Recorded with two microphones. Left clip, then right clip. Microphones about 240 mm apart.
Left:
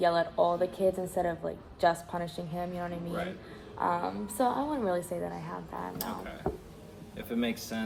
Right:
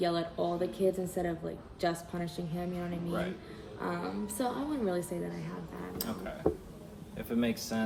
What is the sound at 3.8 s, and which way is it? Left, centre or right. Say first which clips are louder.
Speech: left 6 dB; centre.